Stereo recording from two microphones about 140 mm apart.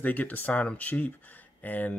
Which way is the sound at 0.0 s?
10° left (ahead or behind).